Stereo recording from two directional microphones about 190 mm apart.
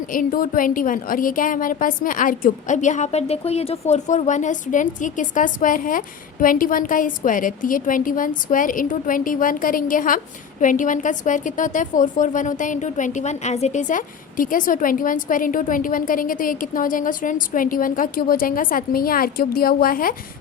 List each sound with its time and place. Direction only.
0.1 s a woman's voice: 45° left (ahead or behind)